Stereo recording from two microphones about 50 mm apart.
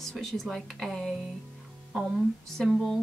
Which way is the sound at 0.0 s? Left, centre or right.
Centre.